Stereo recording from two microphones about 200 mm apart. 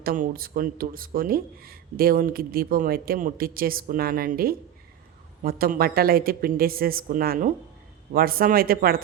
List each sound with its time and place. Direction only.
0.0 s speech: 45° right (ahead or behind)